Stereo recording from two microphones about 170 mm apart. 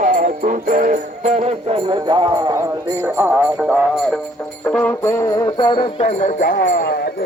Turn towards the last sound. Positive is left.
turn(degrees=60)  # may be behind; listen again after turning